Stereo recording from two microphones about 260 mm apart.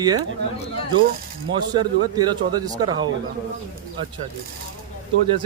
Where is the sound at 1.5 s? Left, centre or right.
Centre.